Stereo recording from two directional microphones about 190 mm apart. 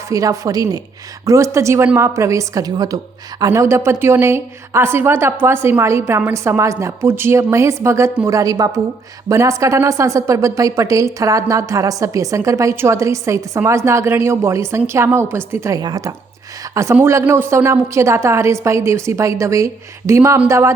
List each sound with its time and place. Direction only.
0.1 s a woman's voice: 20° right (ahead or behind)